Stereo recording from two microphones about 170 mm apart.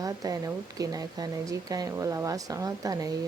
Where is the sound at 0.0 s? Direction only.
20° right (ahead or behind).